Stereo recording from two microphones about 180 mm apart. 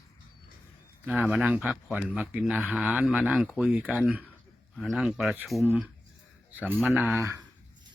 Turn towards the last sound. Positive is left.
turn(degrees=-15)  # may be behind; listen again after turning